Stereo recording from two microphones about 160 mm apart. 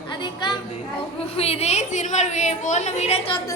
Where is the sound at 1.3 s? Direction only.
40° left (ahead or behind).